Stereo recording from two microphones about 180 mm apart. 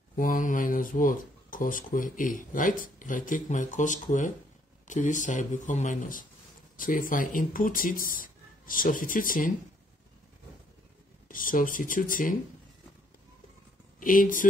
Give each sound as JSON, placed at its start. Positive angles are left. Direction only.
{"t": 0.1, "sound": "speech", "side_deg": 50}
{"t": 11.2, "sound": "speech", "side_deg": 50}
{"t": 13.9, "sound": "speech", "side_deg": 50}